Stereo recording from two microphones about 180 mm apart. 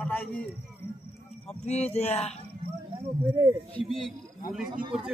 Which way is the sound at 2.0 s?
35° left (ahead or behind).